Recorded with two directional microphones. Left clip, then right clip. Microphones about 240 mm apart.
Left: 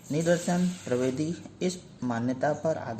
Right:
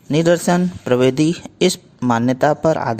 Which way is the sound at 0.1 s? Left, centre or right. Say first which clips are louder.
Right 12 dB; right.